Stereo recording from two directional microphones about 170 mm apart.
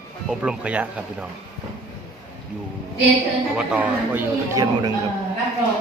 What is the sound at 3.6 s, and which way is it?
Speech, 5° right (ahead or behind).